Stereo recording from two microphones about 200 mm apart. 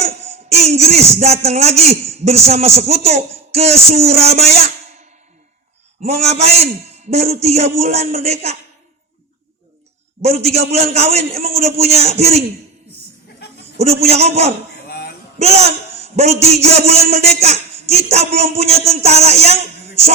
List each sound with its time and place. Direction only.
0.5 s speech: 30° right (ahead or behind)
6.1 s speech: 30° right (ahead or behind)
10.2 s speech: 30° right (ahead or behind)
13.7 s speech: 30° right (ahead or behind)
14.8 s a sound: 50° left (ahead or behind)
15.4 s speech: 30° right (ahead or behind)